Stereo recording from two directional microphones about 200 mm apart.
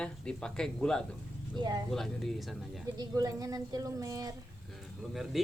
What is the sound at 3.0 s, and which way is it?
Speech, 20° right (ahead or behind).